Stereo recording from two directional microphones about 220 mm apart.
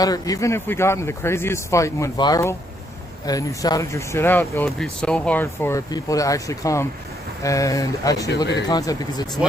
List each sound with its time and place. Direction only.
0.0 s speech: 15° left (ahead or behind)